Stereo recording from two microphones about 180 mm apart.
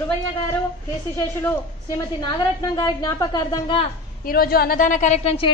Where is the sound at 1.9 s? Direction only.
20° left (ahead or behind).